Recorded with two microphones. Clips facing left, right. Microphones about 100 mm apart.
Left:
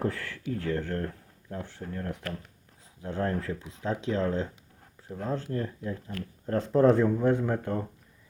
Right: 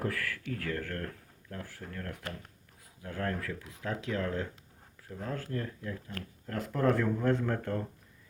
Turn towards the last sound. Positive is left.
turn(degrees=15)  # may be behind; listen again after turning